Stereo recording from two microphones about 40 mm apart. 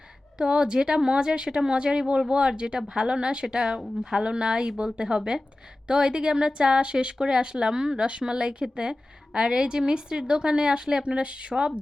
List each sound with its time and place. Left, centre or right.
0.3 s a woman's voice: right